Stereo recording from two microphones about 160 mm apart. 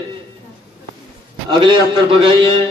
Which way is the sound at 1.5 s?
30° right (ahead or behind).